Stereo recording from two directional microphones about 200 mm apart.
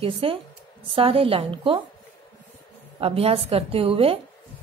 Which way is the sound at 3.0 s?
30° right (ahead or behind).